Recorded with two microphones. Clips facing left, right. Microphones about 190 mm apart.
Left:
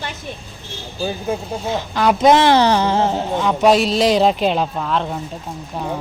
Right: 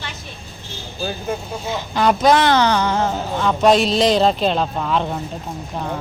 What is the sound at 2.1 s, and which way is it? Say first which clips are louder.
Speech: left 4 dB; 25° left (ahead or behind).